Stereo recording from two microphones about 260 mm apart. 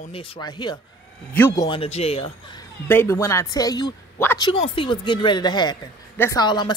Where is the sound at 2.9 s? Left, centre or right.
Centre.